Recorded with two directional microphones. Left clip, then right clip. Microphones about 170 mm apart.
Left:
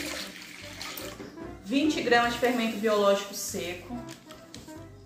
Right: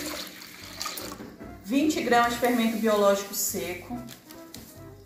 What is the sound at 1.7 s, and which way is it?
A woman's voice, 20° left (ahead or behind).